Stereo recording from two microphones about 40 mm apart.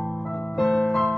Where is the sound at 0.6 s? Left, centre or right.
Centre.